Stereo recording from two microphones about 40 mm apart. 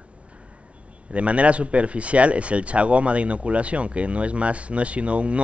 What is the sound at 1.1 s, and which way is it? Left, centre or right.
Speech, right.